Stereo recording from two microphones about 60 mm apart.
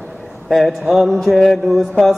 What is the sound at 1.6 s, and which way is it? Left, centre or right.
Mantra, centre.